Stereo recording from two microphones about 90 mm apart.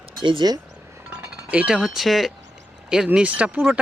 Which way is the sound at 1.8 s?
Centre (ahead or behind).